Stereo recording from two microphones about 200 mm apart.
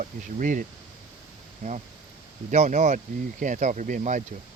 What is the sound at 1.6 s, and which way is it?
Speech, 40° right (ahead or behind).